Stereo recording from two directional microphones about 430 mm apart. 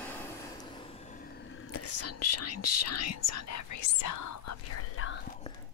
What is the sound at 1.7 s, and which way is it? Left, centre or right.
Speech, left.